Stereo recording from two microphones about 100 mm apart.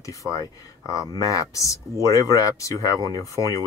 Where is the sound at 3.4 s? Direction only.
45° right (ahead or behind).